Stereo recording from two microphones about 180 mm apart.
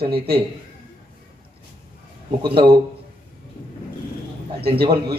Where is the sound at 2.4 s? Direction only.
30° right (ahead or behind).